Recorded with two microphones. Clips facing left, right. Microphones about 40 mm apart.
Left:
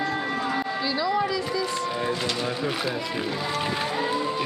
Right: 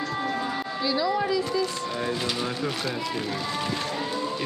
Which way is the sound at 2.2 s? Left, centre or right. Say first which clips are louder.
Left 1 dB; centre.